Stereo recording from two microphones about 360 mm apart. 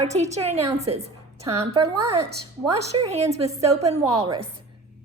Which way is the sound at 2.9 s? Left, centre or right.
Centre.